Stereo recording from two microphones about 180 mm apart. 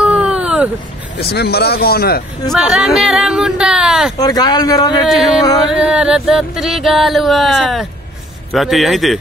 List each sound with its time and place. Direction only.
0.0 s a sound: 5° right (ahead or behind)
1.3 s speech: 65° left (ahead or behind)
2.5 s speech: centre (ahead or behind)
4.2 s speech: 20° left (ahead or behind)
5.0 s speech: centre (ahead or behind)